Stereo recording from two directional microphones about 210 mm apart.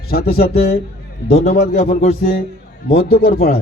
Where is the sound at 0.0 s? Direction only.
50° left (ahead or behind).